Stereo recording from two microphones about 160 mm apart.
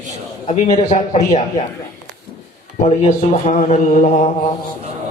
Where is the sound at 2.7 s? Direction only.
45° left (ahead or behind).